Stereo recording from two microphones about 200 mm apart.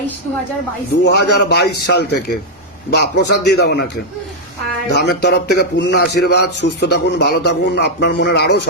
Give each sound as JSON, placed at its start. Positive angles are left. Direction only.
{"t": 1.0, "sound": "speech", "side_deg": 55}
{"t": 4.9, "sound": "speech", "side_deg": 55}